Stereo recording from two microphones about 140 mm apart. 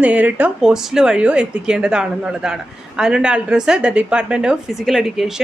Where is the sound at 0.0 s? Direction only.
10° right (ahead or behind).